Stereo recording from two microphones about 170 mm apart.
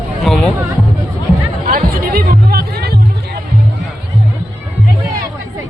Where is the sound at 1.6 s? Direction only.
55° right (ahead or behind); by 3.4 s 70° right (ahead or behind).